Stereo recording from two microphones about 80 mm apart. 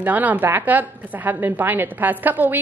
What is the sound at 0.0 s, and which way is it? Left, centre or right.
A woman's voice, right.